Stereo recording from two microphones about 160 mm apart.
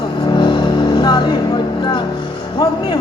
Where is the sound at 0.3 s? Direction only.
30° left (ahead or behind).